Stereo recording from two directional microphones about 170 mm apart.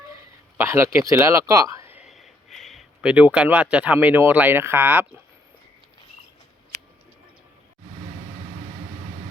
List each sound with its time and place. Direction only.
0.5 s speech: 15° right (ahead or behind)
2.0 s speech: centre (ahead or behind)